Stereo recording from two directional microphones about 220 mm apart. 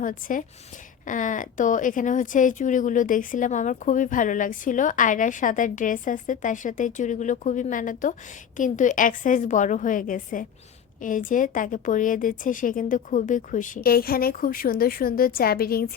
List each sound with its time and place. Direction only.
0.0 s speech: 40° left (ahead or behind)